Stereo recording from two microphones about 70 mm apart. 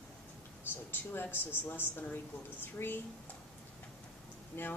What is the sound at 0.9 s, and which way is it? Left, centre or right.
Speech, left.